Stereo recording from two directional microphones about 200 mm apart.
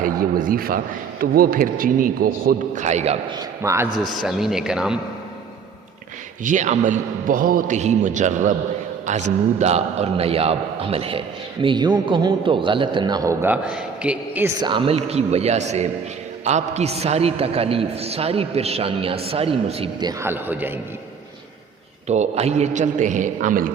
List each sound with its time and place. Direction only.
0.0 s a man's voice: 45° right (ahead or behind)
3.3 s a man's voice: 15° right (ahead or behind)
4.1 s speech: centre (ahead or behind)
6.4 s a man's voice: 40° right (ahead or behind); by 14.5 s 5° right (ahead or behind)
14.6 s a man's voice: 25° right (ahead or behind); by 20.7 s 10° right (ahead or behind)
22.0 s a man's voice: 35° right (ahead or behind)